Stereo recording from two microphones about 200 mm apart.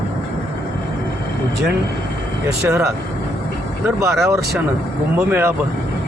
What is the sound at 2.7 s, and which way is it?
Speech, 15° right (ahead or behind).